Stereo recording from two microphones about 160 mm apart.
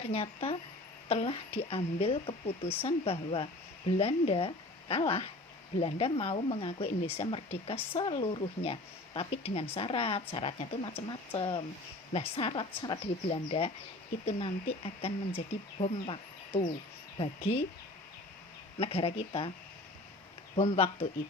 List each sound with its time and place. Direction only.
0.0 s speech: 35° left (ahead or behind)
18.8 s speech: 40° left (ahead or behind)
20.6 s speech: 40° left (ahead or behind)